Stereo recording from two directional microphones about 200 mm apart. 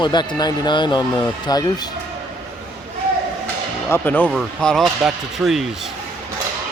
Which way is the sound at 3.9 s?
10° left (ahead or behind).